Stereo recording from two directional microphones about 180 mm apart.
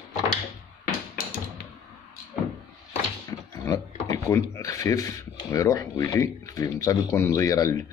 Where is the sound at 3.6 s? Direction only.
15° left (ahead or behind).